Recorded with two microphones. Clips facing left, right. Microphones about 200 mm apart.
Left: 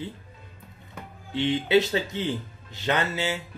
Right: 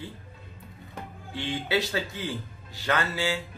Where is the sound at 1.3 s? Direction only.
20° left (ahead or behind).